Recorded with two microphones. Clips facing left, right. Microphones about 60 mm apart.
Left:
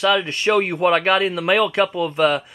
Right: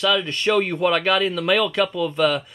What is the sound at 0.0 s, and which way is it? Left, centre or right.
Speech, centre.